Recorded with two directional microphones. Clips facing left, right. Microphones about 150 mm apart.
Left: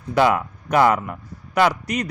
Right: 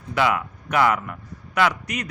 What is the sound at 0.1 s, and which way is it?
A man's voice, 40° left (ahead or behind).